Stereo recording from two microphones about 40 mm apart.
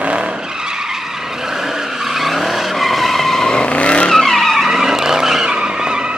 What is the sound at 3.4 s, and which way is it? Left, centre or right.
Vehicle, left.